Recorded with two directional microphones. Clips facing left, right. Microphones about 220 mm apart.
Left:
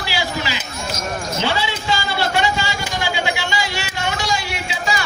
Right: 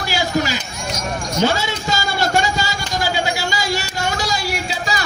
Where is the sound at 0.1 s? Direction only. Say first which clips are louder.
Right 5 dB; 45° right (ahead or behind).